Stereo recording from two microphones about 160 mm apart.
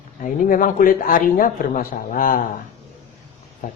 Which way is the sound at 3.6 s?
60° left (ahead or behind).